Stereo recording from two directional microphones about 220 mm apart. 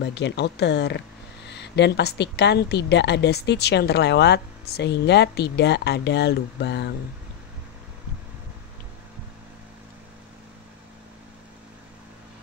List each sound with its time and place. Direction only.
0.0 s speech: 50° left (ahead or behind)